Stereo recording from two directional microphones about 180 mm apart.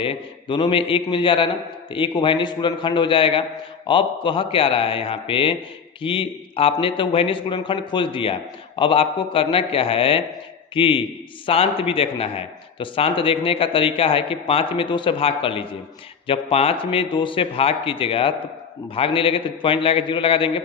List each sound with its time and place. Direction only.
0.0 s a man's voice: 30° left (ahead or behind)